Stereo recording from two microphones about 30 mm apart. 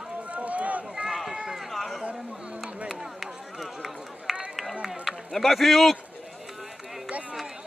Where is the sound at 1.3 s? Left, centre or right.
Right.